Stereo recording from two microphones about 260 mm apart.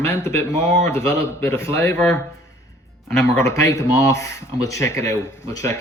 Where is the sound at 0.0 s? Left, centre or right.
Centre.